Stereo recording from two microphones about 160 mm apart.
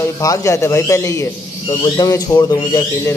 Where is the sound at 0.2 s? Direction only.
20° left (ahead or behind).